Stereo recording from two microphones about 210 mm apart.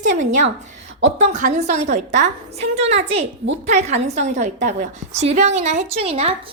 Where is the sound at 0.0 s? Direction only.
35° right (ahead or behind).